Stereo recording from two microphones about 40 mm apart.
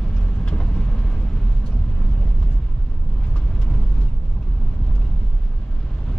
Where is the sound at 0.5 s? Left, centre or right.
Left.